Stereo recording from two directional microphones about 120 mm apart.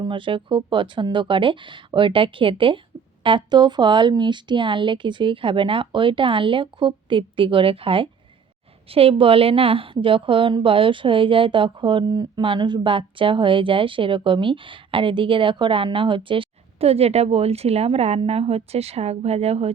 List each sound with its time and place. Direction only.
0.0 s a woman's voice: 45° right (ahead or behind)